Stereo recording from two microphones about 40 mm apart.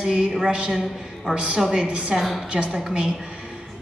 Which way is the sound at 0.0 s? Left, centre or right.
Right.